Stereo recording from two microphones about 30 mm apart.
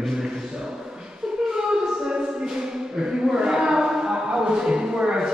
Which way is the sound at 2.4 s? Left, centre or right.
Centre.